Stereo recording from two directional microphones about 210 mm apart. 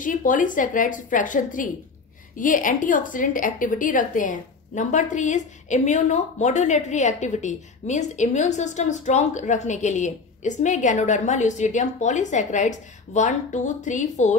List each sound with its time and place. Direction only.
0.0 s a woman's voice: 40° left (ahead or behind)